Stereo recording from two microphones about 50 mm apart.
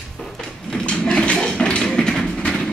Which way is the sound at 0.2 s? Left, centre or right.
Centre.